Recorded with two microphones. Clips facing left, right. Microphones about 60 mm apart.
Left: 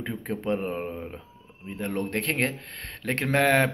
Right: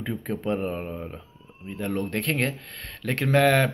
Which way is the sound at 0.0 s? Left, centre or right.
Centre.